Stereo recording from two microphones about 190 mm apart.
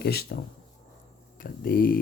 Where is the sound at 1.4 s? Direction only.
50° left (ahead or behind).